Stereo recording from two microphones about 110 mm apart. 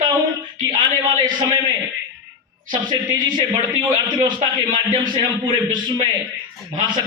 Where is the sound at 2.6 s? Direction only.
45° right (ahead or behind).